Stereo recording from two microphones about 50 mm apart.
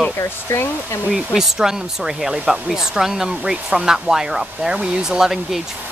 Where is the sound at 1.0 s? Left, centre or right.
Centre.